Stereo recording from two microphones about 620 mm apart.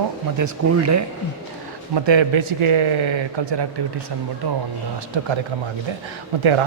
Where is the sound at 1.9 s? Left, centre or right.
Right.